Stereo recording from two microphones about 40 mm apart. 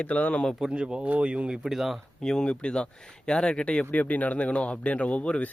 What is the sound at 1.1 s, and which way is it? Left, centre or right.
Speech, right.